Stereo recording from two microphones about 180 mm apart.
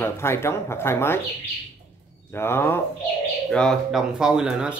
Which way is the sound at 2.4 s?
15° left (ahead or behind).